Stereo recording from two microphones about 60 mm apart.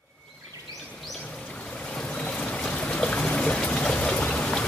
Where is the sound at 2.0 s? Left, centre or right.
Centre.